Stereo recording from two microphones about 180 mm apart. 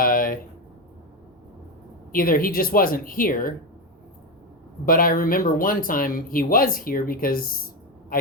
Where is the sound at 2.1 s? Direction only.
55° left (ahead or behind).